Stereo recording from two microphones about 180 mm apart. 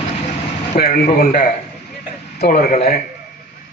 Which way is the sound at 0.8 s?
55° left (ahead or behind).